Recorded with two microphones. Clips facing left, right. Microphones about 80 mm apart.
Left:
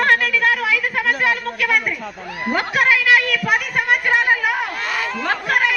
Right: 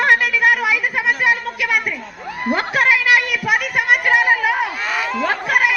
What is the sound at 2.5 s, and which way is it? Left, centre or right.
A woman's voice, right.